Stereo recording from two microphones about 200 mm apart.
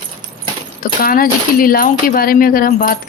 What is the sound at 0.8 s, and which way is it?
Speech, 45° left (ahead or behind).